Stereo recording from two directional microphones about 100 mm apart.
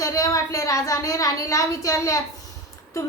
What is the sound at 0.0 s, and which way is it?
Speech, 35° left (ahead or behind).